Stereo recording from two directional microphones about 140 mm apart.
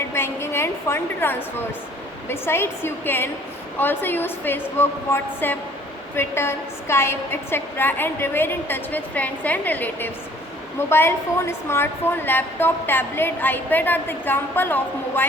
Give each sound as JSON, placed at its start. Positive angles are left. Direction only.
{"t": 0.1, "sound": "a woman's voice", "side_deg": 20}